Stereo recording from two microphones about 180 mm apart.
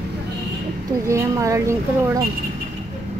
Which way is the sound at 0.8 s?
15° right (ahead or behind).